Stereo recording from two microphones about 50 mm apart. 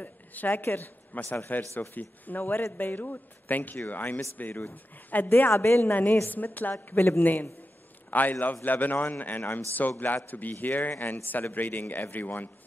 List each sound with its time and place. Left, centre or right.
0.0 s a woman's voice: left
6.2 s a man's voice: left